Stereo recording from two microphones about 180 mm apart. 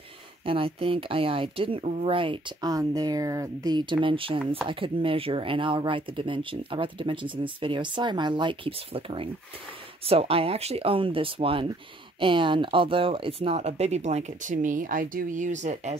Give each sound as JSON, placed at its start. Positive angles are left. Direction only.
{"t": 0.5, "sound": "speech", "side_deg": -30}